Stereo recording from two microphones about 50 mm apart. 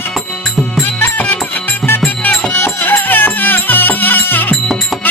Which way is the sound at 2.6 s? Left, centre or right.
Left.